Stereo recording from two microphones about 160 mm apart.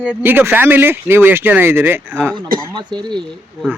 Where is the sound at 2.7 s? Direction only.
25° right (ahead or behind).